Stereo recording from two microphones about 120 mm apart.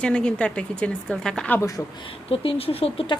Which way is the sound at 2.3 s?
55° left (ahead or behind).